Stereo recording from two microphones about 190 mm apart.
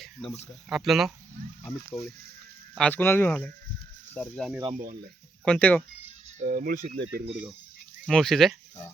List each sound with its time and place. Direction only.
0.0 s a sound: centre (ahead or behind)
0.7 s speech: centre (ahead or behind)
4.7 s speech: 50° right (ahead or behind)
5.5 s speech: 5° left (ahead or behind)
6.2 s speech: 40° right (ahead or behind)
8.0 s speech: centre (ahead or behind)